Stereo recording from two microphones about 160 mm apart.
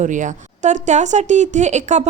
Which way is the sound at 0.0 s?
50° right (ahead or behind).